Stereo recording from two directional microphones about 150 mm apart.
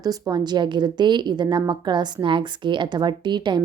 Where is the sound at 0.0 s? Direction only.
25° right (ahead or behind).